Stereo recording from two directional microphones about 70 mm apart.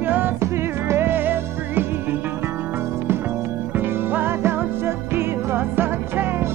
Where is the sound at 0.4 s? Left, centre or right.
Right.